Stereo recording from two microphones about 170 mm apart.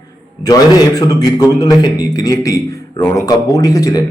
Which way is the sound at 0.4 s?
20° left (ahead or behind).